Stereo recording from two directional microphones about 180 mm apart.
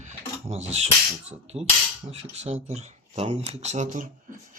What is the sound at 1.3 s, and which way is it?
Speech, 35° right (ahead or behind).